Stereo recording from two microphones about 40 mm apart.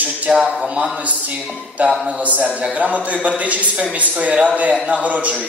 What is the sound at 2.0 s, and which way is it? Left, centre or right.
A man's voice, right.